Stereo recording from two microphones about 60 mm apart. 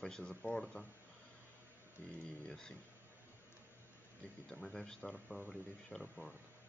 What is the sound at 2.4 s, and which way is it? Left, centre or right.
Speech, centre.